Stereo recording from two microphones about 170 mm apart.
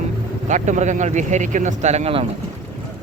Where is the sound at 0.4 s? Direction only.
45° right (ahead or behind).